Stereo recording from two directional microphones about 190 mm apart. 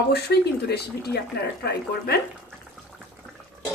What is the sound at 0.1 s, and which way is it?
Speech, 60° left (ahead or behind).